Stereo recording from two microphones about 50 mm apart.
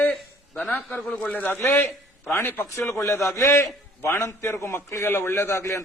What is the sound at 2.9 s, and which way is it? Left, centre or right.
A man's voice, left.